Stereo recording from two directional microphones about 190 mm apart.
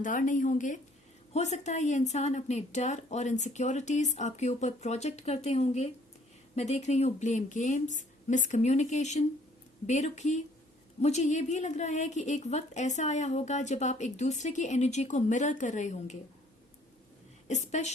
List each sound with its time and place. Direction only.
0.0 s a woman's voice: 45° left (ahead or behind)
17.5 s a woman's voice: 35° left (ahead or behind)